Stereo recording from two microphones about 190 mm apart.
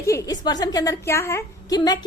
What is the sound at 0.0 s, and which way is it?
A woman's voice, 15° left (ahead or behind).